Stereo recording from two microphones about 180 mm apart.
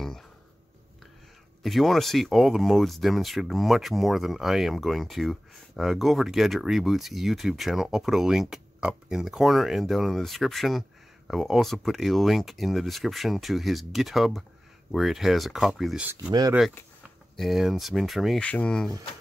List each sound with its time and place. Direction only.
1.6 s speech: centre (ahead or behind)
16.3 s speech: 20° right (ahead or behind)
17.0 s speech: centre (ahead or behind)